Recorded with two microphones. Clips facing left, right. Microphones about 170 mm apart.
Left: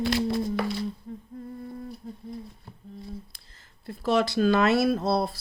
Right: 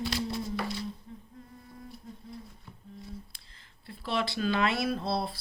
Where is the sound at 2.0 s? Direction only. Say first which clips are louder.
Left 6 dB; 35° left (ahead or behind).